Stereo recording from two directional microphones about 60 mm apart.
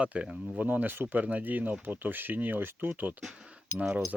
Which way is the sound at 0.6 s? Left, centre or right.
Right.